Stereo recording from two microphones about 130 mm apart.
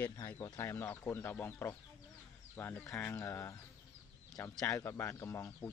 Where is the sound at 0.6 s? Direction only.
15° left (ahead or behind).